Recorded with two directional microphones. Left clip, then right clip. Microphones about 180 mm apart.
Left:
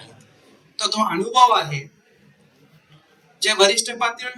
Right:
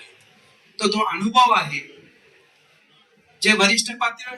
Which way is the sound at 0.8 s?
10° right (ahead or behind).